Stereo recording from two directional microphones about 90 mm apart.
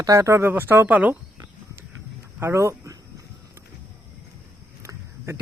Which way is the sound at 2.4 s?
30° right (ahead or behind).